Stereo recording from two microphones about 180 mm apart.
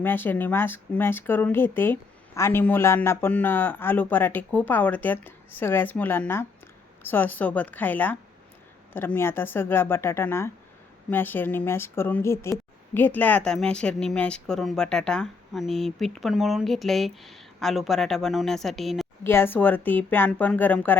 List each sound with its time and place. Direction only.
0.0 s speech: 10° left (ahead or behind)
19.2 s speech: 15° left (ahead or behind)